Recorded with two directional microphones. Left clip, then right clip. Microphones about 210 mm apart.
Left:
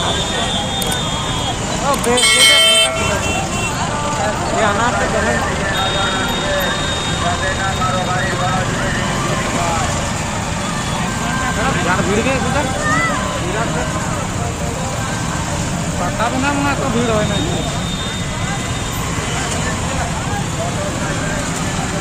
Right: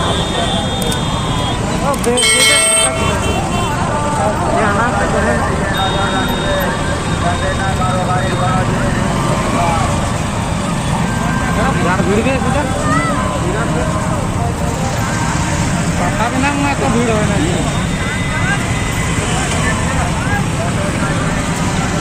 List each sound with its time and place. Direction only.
2.1 s bell: centre (ahead or behind)